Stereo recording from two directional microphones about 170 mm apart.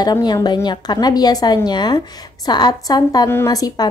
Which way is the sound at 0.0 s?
25° left (ahead or behind).